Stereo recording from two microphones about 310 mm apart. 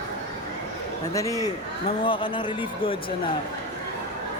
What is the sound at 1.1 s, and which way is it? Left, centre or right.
Speech, centre.